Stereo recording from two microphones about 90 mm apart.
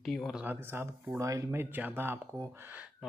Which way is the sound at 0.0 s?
5° left (ahead or behind).